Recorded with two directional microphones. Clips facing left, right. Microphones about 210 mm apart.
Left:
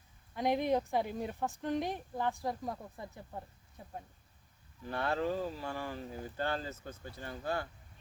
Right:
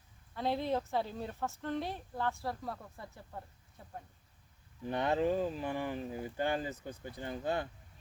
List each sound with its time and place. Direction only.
0.3 s speech: 15° left (ahead or behind)
4.8 s speech: 20° right (ahead or behind)